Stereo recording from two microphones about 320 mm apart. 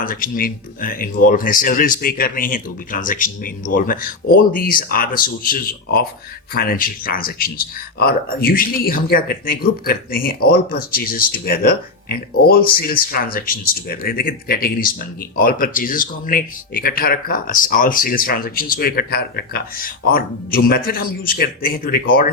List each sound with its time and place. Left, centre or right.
0.0 s speech: left